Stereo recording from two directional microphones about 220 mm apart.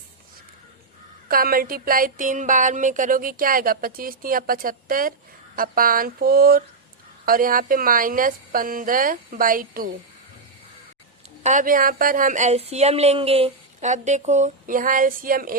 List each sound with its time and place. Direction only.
1.3 s speech: 40° right (ahead or behind)
11.4 s speech: 35° right (ahead or behind)